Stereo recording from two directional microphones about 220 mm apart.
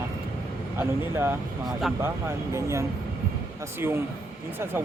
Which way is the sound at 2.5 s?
15° right (ahead or behind).